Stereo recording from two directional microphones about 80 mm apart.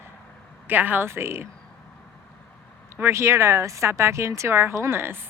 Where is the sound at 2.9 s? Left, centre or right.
Right.